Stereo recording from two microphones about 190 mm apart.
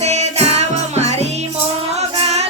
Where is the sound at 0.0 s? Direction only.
35° right (ahead or behind).